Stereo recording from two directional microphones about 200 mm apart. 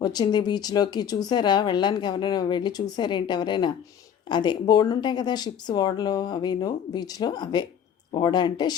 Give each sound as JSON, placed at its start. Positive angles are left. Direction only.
{"t": 0.0, "sound": "speech", "side_deg": 20}